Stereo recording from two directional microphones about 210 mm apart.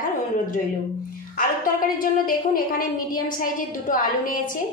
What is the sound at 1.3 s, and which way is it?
A woman's voice, 40° left (ahead or behind).